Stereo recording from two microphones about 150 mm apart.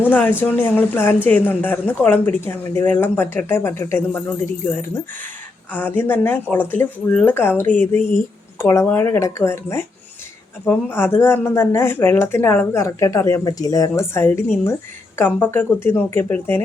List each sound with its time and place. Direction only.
0.0 s a woman's voice: 10° left (ahead or behind)